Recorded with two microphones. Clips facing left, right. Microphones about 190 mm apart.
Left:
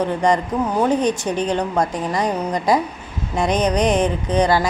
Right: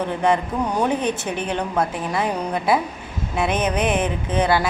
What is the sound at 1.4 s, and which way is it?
Speech, 15° left (ahead or behind).